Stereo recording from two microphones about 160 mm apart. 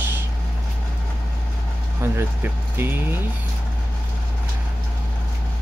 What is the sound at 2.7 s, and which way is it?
Speech, 15° right (ahead or behind).